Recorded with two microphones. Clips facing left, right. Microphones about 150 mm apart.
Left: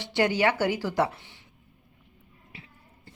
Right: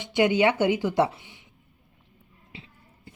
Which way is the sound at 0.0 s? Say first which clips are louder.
Right 3 dB; 15° right (ahead or behind).